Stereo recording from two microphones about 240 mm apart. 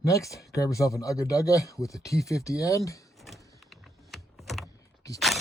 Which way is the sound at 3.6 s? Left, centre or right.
Centre.